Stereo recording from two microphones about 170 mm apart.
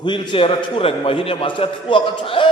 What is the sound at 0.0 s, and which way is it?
A man's voice, 25° left (ahead or behind).